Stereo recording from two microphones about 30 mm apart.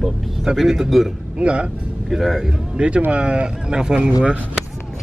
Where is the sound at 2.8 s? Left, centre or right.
Right.